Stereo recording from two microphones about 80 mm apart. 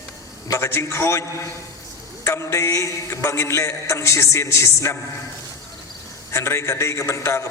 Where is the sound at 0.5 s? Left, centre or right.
Left.